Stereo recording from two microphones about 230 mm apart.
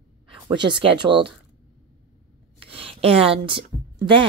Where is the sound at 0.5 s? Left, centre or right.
Right.